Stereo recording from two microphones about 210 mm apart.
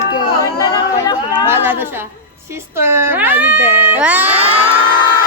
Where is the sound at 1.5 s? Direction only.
10° right (ahead or behind).